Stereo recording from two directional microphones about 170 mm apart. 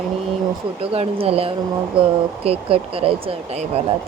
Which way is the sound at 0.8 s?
35° right (ahead or behind).